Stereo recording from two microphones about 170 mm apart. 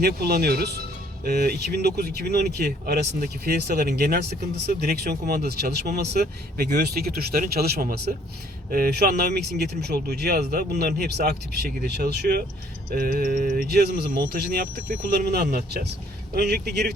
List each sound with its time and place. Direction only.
0.0 s speech: 65° right (ahead or behind)
12.9 s speech: 60° right (ahead or behind)